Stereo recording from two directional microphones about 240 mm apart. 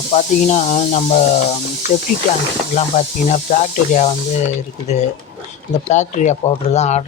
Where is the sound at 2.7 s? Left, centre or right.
Left.